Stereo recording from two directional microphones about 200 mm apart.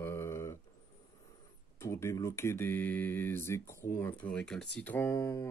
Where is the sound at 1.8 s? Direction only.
15° left (ahead or behind).